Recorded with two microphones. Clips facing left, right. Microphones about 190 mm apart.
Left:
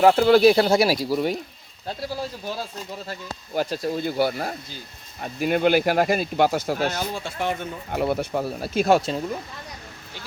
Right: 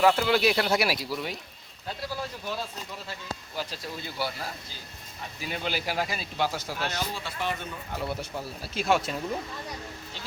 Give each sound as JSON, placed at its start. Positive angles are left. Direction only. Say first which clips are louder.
{"t": 0.0, "sound": "speech", "louder": "left 8 dB", "side_deg": 45}
{"t": 0.5, "sound": "speech", "louder": "left 7 dB", "side_deg": 30}
{"t": 3.1, "sound": "speech", "louder": "left 5 dB", "side_deg": 50}
{"t": 9.0, "sound": "speech", "louder": "left 6 dB", "side_deg": 30}